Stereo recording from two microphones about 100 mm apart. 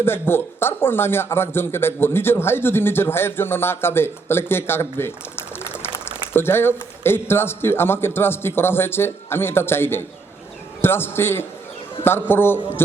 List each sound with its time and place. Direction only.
0.0 s a man's voice: 25° left (ahead or behind)
6.3 s a man's voice: 25° left (ahead or behind)